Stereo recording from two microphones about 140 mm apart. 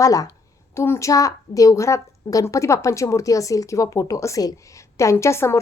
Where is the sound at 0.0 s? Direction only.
25° left (ahead or behind).